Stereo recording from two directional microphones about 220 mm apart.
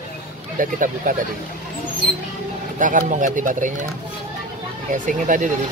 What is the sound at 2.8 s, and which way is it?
Speech, 35° right (ahead or behind).